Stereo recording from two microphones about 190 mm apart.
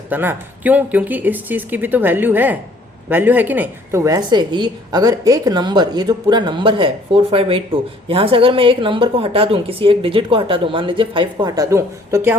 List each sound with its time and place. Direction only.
0.1 s a woman's voice: 10° right (ahead or behind)